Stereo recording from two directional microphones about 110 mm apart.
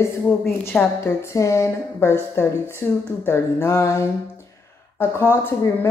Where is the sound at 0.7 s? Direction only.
25° left (ahead or behind).